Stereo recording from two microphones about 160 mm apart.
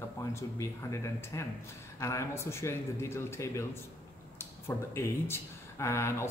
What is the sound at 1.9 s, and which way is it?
A man's voice, 20° left (ahead or behind).